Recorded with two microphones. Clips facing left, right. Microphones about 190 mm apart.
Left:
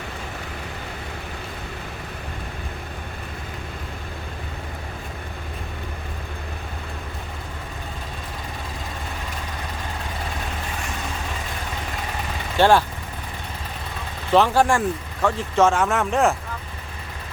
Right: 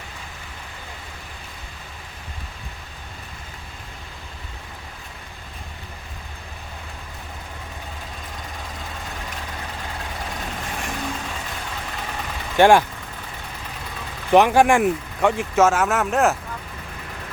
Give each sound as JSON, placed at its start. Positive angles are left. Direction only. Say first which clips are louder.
{"t": 12.5, "sound": "speech", "louder": "right 3 dB", "side_deg": -15}
{"t": 14.3, "sound": "speech", "louder": "right 3 dB", "side_deg": -15}
{"t": 15.5, "sound": "speech", "louder": "left 1 dB", "side_deg": -5}